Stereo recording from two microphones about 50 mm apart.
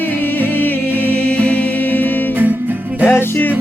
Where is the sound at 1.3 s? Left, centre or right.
Left.